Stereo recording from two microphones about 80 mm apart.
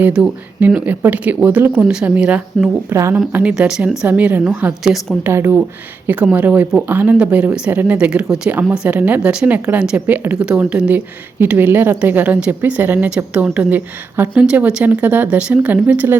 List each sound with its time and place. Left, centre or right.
0.0 s speech: centre
2.9 s speech: right
3.5 s speech: centre
4.8 s a woman's voice: centre
5.2 s speech: right
6.1 s speech: centre
7.9 s speech: centre